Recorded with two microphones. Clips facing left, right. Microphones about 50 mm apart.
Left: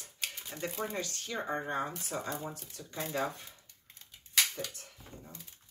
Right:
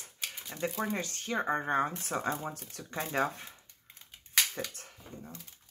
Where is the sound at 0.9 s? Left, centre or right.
Right.